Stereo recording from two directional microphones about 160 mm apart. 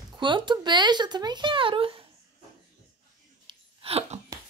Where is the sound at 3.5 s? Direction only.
35° right (ahead or behind).